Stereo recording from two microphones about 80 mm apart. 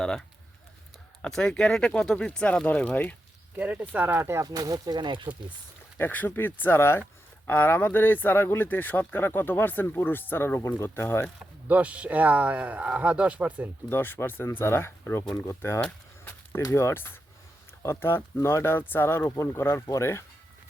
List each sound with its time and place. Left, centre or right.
1.2 s speech: centre
3.6 s speech: centre
4.1 s speech: right
4.5 s speech: right
4.9 s speech: right
6.0 s speech: left
11.7 s speech: centre
13.9 s speech: left